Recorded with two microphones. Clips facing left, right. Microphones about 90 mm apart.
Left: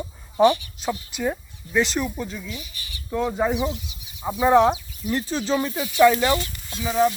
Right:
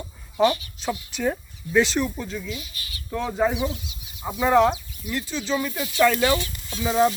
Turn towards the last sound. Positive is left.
turn(degrees=-20)  # may be behind; listen again after turning